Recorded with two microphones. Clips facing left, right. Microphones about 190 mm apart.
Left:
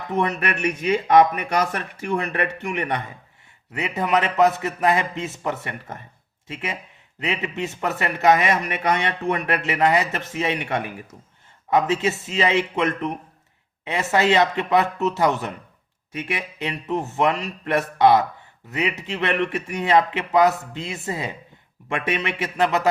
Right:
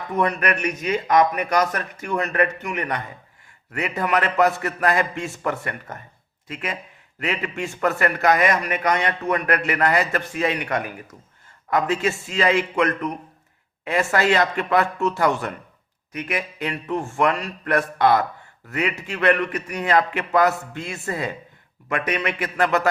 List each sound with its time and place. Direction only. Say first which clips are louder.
0.1 s a man's voice: right 1 dB; 25° left (ahead or behind)
16.6 s a man's voice: left 3 dB; 20° left (ahead or behind)